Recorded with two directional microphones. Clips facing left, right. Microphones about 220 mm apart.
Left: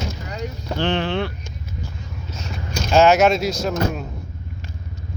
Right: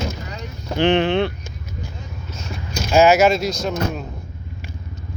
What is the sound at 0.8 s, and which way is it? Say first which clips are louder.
Speech: right 5 dB; 20° right (ahead or behind).